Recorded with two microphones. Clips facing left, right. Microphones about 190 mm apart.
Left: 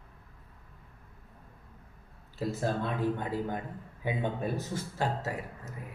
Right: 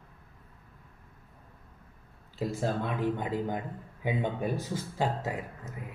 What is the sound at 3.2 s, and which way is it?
Speech, 15° right (ahead or behind).